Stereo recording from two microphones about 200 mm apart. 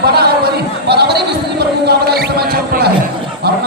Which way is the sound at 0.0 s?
50° right (ahead or behind).